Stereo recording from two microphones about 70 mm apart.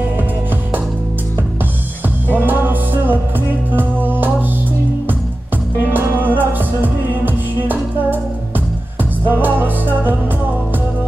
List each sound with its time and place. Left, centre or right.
2.3 s music: right
5.9 s music: right